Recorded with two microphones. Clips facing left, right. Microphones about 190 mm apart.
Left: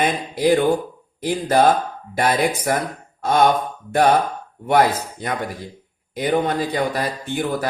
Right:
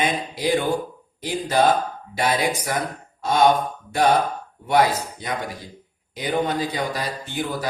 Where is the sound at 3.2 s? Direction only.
50° left (ahead or behind).